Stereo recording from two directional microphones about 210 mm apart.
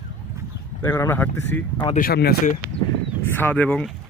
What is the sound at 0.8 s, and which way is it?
Speech, 15° left (ahead or behind).